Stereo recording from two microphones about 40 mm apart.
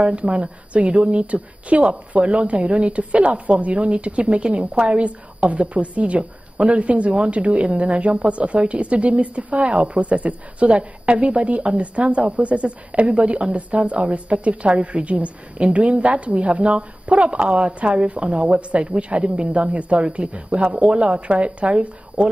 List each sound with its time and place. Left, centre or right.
0.0 s speech: right